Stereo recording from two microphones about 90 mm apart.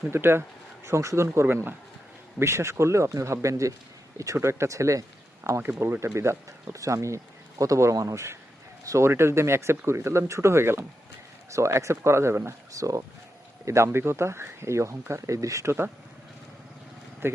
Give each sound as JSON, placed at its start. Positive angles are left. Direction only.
{"t": 0.1, "sound": "speech", "side_deg": -25}
{"t": 17.2, "sound": "speech", "side_deg": -25}